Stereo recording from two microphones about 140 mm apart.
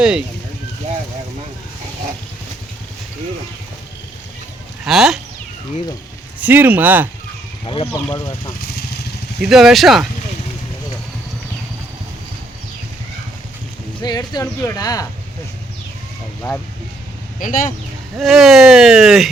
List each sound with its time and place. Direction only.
0.0 s speech: 5° right (ahead or behind)
4.9 s speech: centre (ahead or behind)
6.4 s speech: 10° right (ahead or behind)
7.6 s speech: 35° left (ahead or behind)
8.1 s speech: 25° left (ahead or behind)
9.4 s speech: 5° right (ahead or behind)
14.0 s speech: 30° left (ahead or behind)
17.4 s speech: 75° left (ahead or behind)
18.2 s speech: centre (ahead or behind)